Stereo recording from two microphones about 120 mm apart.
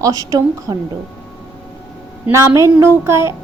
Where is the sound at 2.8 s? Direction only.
20° right (ahead or behind).